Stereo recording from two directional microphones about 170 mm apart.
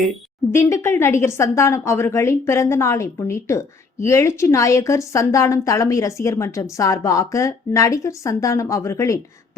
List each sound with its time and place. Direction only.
0.5 s a woman's voice: 15° left (ahead or behind)